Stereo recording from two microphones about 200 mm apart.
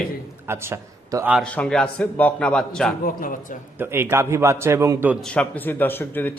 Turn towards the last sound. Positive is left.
turn(degrees=10)  # may be behind; listen again after turning